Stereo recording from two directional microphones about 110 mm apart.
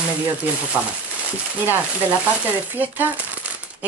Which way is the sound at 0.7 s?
15° right (ahead or behind).